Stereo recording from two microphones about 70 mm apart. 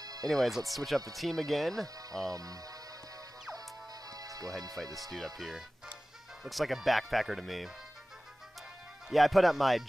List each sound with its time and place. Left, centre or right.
0.0 s music: right
0.3 s speech: centre
2.3 s speech: right
4.1 s music: right
4.8 s speech: centre
9.1 s speech: centre